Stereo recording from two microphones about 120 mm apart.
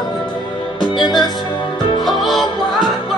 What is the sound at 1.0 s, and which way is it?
Music, 35° left (ahead or behind).